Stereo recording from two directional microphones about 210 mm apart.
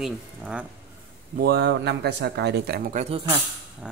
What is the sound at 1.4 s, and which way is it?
Speech, 50° right (ahead or behind).